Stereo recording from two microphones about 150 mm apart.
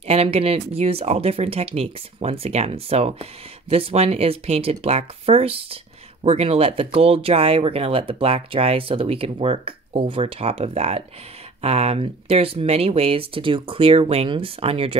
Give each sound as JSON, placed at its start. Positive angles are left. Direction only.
{"t": 0.0, "sound": "speech", "side_deg": -40}